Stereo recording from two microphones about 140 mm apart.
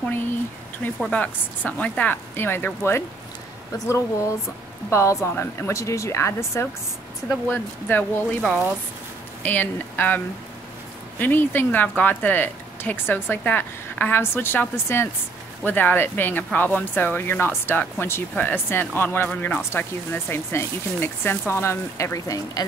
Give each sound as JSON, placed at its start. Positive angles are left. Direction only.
{"t": 1.0, "sound": "speech", "side_deg": 10}